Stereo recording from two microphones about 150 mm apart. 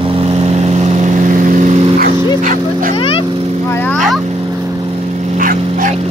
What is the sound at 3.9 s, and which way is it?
Vehicle, centre (ahead or behind).